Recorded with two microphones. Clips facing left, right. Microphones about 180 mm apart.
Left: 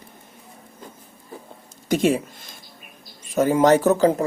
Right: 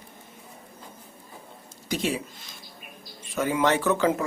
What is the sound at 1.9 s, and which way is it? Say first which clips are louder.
Speech: left 8 dB; 50° left (ahead or behind).